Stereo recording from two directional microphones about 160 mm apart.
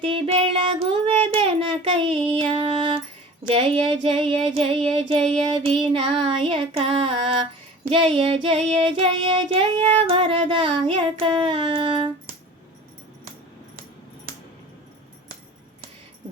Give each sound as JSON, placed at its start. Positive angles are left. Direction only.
{"t": 0.0, "sound": "child singing", "side_deg": -35}